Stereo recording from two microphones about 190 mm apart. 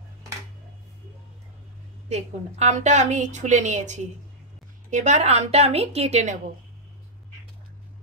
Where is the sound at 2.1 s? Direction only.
35° right (ahead or behind).